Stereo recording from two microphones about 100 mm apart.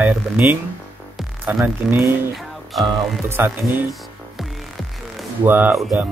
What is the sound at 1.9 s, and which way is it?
Speech, 25° right (ahead or behind).